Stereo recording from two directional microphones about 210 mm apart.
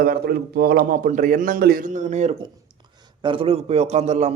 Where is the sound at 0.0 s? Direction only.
45° right (ahead or behind).